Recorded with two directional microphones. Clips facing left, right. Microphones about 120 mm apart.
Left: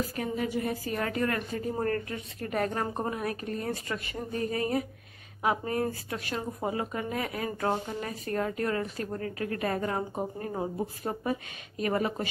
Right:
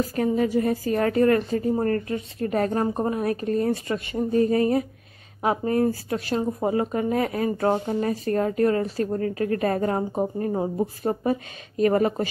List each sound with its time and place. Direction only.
0.1 s speech: 40° right (ahead or behind)